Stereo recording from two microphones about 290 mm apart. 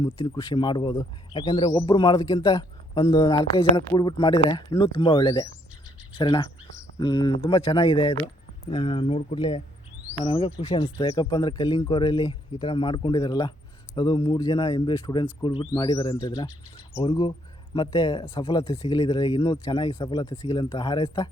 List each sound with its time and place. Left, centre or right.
0.5 s speech: centre